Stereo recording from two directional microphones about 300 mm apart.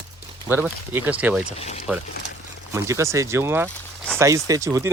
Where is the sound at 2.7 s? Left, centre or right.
Centre.